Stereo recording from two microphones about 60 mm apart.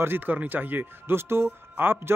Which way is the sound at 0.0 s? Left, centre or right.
Right.